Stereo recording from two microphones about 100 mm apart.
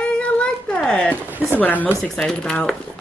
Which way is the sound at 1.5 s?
15° left (ahead or behind).